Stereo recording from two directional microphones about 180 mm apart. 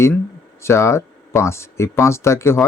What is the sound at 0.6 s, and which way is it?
Speech, 15° left (ahead or behind).